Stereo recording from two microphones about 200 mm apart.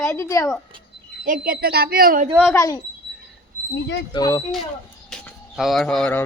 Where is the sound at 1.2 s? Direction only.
45° right (ahead or behind).